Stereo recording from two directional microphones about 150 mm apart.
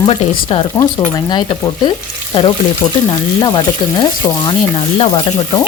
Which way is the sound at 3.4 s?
30° left (ahead or behind).